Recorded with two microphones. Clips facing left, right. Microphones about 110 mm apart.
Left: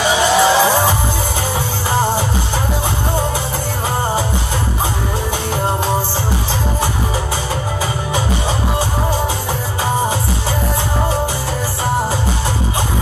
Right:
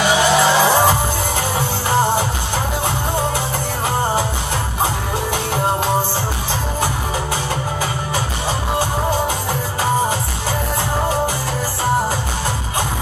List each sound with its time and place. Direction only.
0.3 s music: centre (ahead or behind)